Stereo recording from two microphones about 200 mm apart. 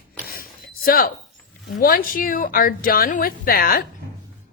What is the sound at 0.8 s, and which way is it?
A woman's voice, 45° left (ahead or behind).